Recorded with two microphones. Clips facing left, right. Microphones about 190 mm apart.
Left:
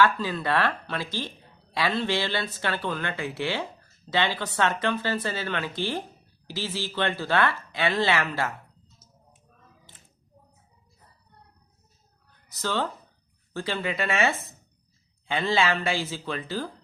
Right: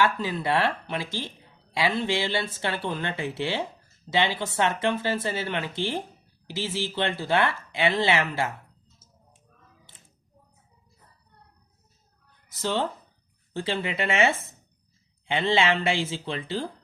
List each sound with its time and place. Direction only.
0.0 s speech: 20° right (ahead or behind)
12.6 s speech: 25° right (ahead or behind)